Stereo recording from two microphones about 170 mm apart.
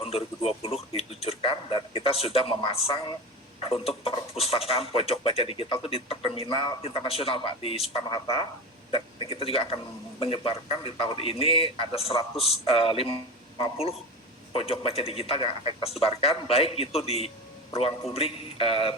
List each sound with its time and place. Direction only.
0.0 s speech: 35° left (ahead or behind)